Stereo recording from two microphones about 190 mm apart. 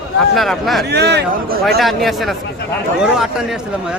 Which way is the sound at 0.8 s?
60° right (ahead or behind).